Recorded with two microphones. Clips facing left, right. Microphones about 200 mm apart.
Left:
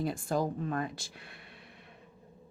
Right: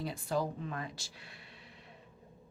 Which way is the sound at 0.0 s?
50° left (ahead or behind).